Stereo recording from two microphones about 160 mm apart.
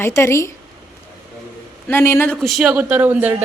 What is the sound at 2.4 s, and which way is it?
Speech, centre (ahead or behind).